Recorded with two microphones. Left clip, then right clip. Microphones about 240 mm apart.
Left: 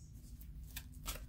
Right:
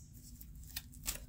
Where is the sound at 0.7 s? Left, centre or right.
Centre.